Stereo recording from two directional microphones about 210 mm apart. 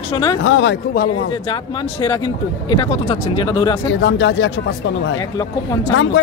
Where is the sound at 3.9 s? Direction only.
65° left (ahead or behind).